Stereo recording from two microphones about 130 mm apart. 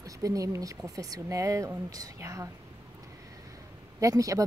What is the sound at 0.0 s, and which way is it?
Speech, 25° right (ahead or behind).